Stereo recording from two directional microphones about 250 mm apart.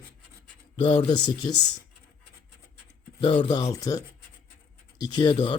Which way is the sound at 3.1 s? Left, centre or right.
Centre.